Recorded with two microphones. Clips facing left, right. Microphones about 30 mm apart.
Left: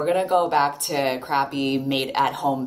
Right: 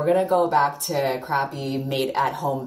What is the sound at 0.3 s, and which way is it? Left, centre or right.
Speech, left.